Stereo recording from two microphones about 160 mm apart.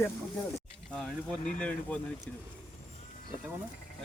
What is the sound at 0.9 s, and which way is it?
Speech, 5° left (ahead or behind).